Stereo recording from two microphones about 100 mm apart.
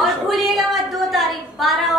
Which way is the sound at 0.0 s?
Centre (ahead or behind).